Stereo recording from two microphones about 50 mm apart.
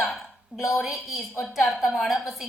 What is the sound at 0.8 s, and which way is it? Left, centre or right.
A woman's voice, centre.